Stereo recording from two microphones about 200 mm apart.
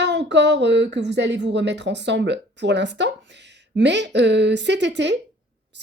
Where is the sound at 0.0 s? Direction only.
60° right (ahead or behind).